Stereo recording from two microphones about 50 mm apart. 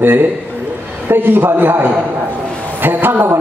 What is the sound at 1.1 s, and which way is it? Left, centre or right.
A man's voice, right.